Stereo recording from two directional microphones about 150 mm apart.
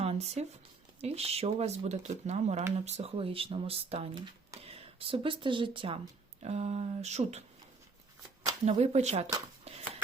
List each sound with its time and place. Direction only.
0.0 s a sound: 45° right (ahead or behind)
1.0 s speech: 45° right (ahead or behind)
6.4 s speech: 45° right (ahead or behind)
8.6 s speech: 45° right (ahead or behind)